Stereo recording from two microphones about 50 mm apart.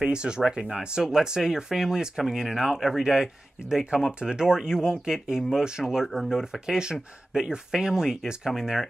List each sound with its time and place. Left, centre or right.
0.0 s speech: centre